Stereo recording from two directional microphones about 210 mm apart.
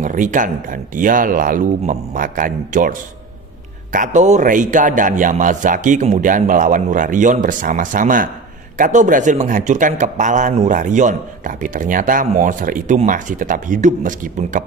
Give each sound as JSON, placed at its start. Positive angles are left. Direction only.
{"t": 0.0, "sound": "a man's voice", "side_deg": -40}